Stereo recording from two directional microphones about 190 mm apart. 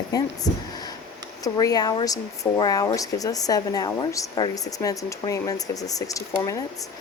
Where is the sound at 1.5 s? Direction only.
20° left (ahead or behind).